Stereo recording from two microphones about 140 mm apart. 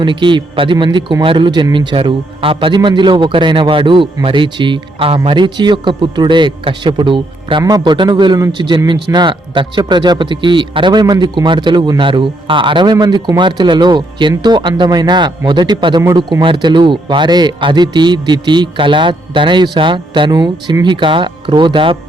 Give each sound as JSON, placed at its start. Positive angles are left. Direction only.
{"t": 0.0, "sound": "a man's voice", "side_deg": -35}